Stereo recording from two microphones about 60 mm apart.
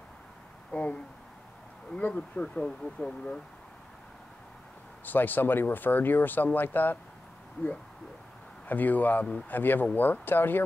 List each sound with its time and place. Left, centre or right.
0.7 s a sound: left
2.0 s speech: left
5.0 s speech: left
8.6 s speech: left